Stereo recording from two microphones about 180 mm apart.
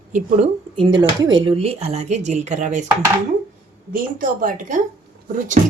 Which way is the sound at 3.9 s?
50° right (ahead or behind).